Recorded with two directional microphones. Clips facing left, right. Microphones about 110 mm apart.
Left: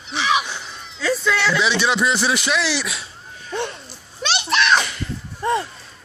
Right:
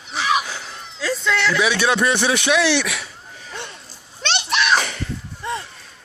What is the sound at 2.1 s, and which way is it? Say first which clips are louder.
Speech: right 2 dB; 65° right (ahead or behind).